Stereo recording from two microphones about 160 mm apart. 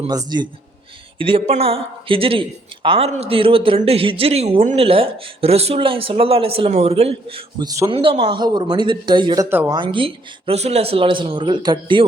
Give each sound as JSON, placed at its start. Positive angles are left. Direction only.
{"t": 0.1, "sound": "speech", "side_deg": -25}
{"t": 1.2, "sound": "speech", "side_deg": -35}
{"t": 9.5, "sound": "speech", "side_deg": -15}
{"t": 9.7, "sound": "speech", "side_deg": -30}